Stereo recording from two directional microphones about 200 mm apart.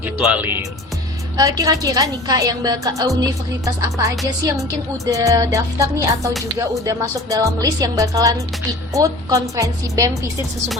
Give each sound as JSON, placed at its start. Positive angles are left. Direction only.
{"t": 0.3, "sound": "speech", "side_deg": -10}